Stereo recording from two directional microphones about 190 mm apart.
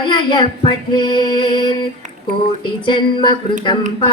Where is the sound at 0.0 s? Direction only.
25° left (ahead or behind).